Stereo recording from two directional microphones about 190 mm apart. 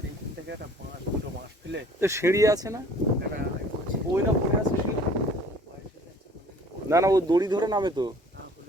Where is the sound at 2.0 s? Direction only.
15° right (ahead or behind).